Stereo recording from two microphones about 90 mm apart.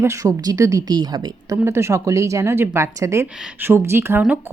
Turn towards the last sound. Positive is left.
turn(degrees=-25)  # may be behind; listen again after turning